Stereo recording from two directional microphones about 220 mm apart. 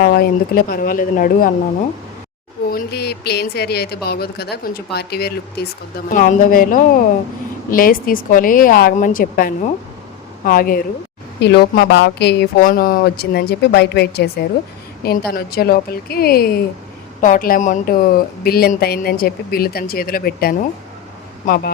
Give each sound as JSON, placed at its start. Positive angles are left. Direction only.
{"t": 0.0, "sound": "a woman's voice", "side_deg": 40}
{"t": 2.6, "sound": "a woman's voice", "side_deg": 45}